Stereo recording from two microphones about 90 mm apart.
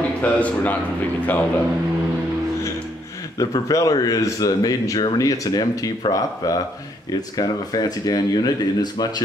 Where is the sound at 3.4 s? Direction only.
40° left (ahead or behind).